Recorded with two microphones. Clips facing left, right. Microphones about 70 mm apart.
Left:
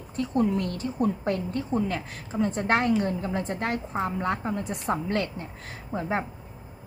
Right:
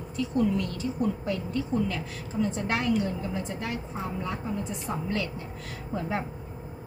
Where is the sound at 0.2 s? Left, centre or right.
Left.